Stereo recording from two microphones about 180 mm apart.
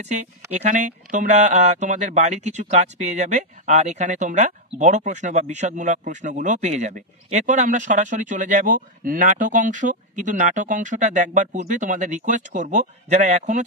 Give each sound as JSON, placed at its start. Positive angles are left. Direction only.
{"t": 0.0, "sound": "speech", "side_deg": -40}